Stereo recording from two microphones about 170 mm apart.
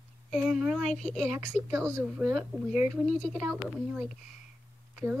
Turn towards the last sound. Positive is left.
turn(degrees=-5)  # may be behind; listen again after turning